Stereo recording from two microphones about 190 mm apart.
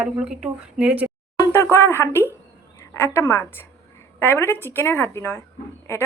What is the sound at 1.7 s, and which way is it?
A woman's voice, 15° left (ahead or behind).